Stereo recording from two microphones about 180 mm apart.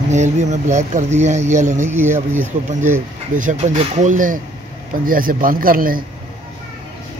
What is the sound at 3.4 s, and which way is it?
Speech, 45° right (ahead or behind).